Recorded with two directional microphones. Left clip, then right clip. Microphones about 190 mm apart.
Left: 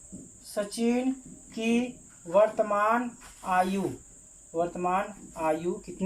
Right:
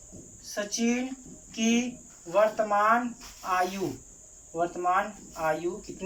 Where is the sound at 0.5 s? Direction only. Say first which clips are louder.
Left 1 dB; 25° left (ahead or behind).